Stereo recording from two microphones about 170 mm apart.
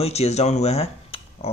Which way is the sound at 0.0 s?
40° left (ahead or behind).